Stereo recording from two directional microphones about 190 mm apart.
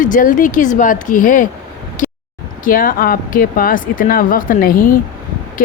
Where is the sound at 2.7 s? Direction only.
50° left (ahead or behind).